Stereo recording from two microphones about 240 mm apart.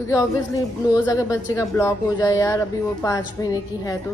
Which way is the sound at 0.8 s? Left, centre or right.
Centre.